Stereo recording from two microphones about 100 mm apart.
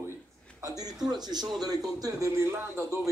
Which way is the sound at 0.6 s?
40° right (ahead or behind).